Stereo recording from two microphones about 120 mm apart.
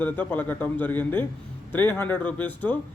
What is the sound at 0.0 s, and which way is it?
A man's voice, 15° left (ahead or behind).